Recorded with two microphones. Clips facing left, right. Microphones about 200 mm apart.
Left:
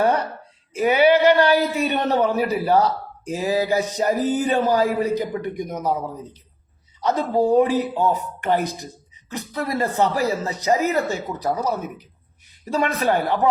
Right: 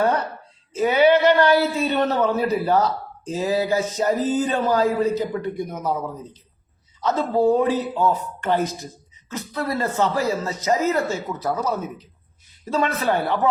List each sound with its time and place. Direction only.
0.7 s a man's voice: 10° left (ahead or behind)
7.0 s speech: 15° left (ahead or behind)